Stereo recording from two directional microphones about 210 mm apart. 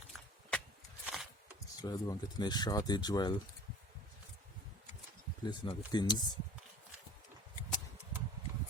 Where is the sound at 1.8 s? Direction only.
20° left (ahead or behind).